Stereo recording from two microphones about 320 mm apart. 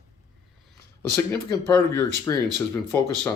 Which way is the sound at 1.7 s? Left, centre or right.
Centre.